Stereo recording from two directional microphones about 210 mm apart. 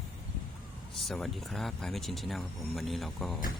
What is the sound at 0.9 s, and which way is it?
Speech, centre (ahead or behind).